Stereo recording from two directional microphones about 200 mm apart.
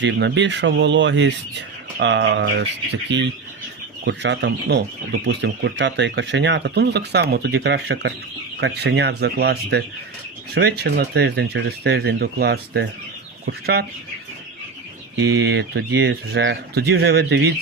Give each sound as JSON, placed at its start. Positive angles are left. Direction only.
{"t": 0.0, "sound": "speech", "side_deg": -60}
{"t": 15.2, "sound": "speech", "side_deg": -55}